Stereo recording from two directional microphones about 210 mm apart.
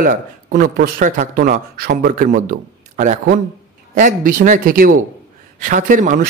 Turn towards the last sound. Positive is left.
turn(degrees=-40)  # may be behind; listen again after turning